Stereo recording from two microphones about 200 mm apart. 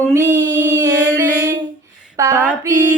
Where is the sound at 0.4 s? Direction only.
15° right (ahead or behind).